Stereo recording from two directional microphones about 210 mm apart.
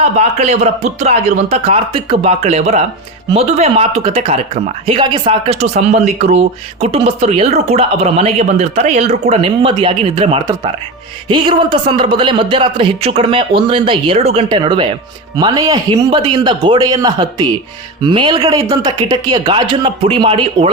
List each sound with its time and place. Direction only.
0.0 s a man's voice: 30° right (ahead or behind)